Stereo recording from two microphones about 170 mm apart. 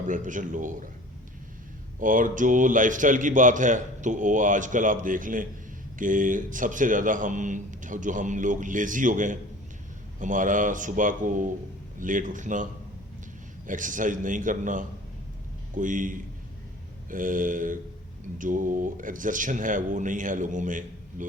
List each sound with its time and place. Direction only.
0.1 s a man's voice: 50° right (ahead or behind)
2.0 s a man's voice: 50° right (ahead or behind)
13.7 s a man's voice: 50° right (ahead or behind)